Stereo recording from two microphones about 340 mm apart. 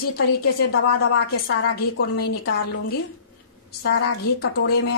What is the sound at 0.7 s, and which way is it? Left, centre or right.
A woman's voice, left.